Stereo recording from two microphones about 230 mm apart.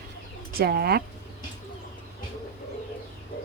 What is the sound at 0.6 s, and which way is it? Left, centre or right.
Speech, right.